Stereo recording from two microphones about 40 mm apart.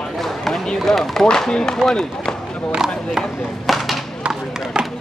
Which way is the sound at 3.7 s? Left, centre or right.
Centre.